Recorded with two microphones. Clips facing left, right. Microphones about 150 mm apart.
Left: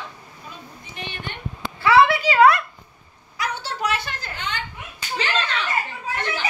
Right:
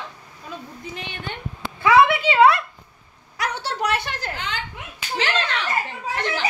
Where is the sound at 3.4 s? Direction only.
70° right (ahead or behind); by 5.3 s 90° right.